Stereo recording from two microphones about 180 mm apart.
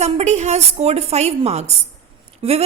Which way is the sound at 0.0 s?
40° right (ahead or behind).